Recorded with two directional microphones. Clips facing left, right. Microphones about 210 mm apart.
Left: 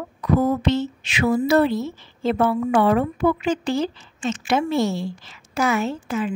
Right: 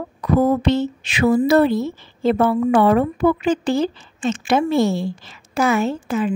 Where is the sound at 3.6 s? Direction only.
55° right (ahead or behind).